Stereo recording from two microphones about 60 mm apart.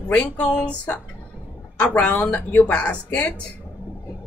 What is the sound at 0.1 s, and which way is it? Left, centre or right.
Speech, left.